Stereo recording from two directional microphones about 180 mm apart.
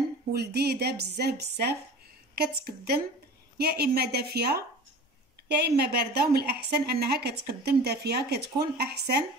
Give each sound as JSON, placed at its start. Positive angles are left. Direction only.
{"t": 0.3, "sound": "a woman's voice", "side_deg": -65}